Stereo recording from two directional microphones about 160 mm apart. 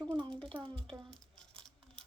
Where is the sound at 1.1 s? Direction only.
5° left (ahead or behind).